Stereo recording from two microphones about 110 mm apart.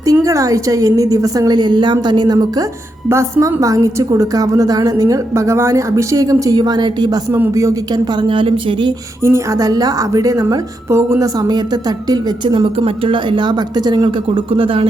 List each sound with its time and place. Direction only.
0.0 s a woman's voice: 30° right (ahead or behind)
3.1 s a woman's voice: 25° right (ahead or behind); by 8.9 s 50° right (ahead or behind)
9.2 s a woman's voice: 25° right (ahead or behind); by 14.8 s 55° right (ahead or behind)